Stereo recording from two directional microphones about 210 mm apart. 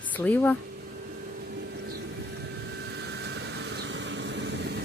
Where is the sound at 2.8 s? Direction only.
55° right (ahead or behind).